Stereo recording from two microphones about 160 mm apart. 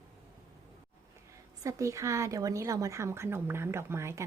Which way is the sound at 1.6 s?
20° right (ahead or behind).